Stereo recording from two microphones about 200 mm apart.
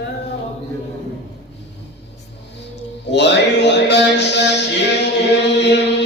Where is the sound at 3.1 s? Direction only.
60° left (ahead or behind).